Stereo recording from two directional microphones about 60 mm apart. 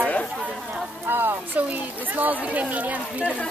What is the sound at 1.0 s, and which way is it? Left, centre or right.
Speech, right.